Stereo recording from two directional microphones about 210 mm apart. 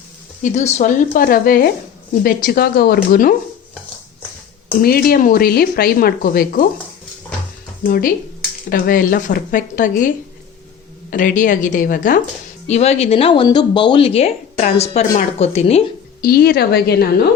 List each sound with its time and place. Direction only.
0.4 s speech: 35° left (ahead or behind)
4.8 s speech: 45° left (ahead or behind)
7.9 s speech: 45° left (ahead or behind)
11.1 s speech: 40° left (ahead or behind)
16.2 s speech: 45° left (ahead or behind)